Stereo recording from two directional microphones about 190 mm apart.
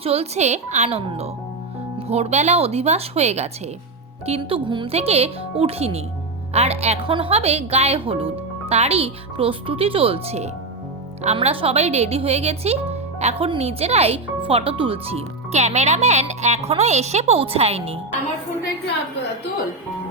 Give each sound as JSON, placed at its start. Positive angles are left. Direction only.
{"t": 0.0, "sound": "a woman's voice", "side_deg": -30}